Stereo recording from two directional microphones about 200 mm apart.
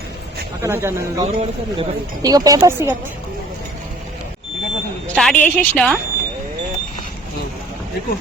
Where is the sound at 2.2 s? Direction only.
20° right (ahead or behind).